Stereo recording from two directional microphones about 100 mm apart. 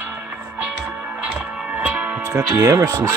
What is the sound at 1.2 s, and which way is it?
Music, 15° right (ahead or behind).